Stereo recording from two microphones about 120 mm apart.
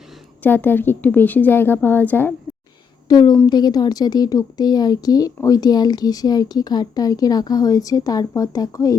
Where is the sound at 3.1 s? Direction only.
35° left (ahead or behind).